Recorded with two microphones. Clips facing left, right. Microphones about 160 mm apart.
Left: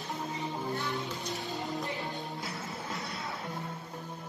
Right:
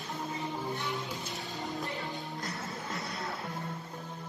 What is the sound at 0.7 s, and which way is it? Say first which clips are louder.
Music: left 1 dB; 20° right (ahead or behind).